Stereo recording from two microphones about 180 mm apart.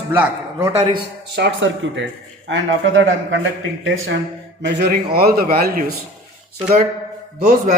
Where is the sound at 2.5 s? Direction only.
90° right.